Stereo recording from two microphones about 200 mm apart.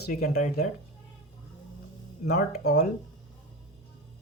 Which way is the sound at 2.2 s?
50° left (ahead or behind).